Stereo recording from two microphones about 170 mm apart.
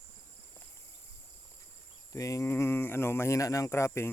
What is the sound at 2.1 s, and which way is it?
Speech, 20° left (ahead or behind).